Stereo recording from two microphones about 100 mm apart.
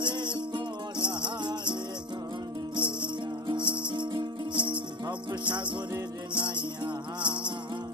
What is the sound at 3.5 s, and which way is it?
Music, 50° right (ahead or behind).